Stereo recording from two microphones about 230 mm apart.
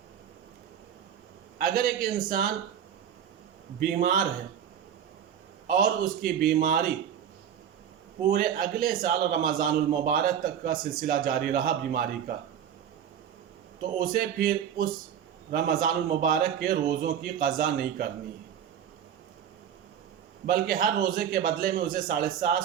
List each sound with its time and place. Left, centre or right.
1.5 s a man's voice: right
3.8 s a man's voice: right
5.6 s a man's voice: right
8.3 s a man's voice: right
14.0 s a man's voice: right
20.5 s a man's voice: right